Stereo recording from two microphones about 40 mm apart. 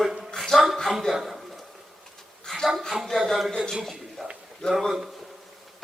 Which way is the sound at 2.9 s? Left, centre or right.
Centre.